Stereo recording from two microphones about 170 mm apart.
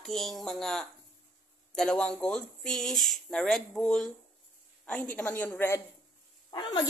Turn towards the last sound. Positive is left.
turn(degrees=25)  # may be behind; listen again after turning